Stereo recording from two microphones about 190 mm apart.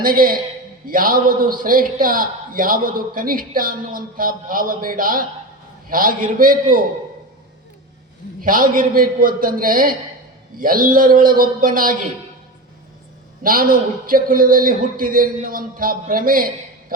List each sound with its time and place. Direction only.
0.0 s a man's voice: 50° right (ahead or behind)
8.4 s a man's voice: 45° right (ahead or behind)
13.4 s a man's voice: 50° right (ahead or behind)